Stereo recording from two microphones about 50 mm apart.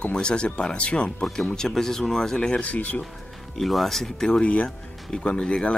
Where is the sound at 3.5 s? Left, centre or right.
Centre.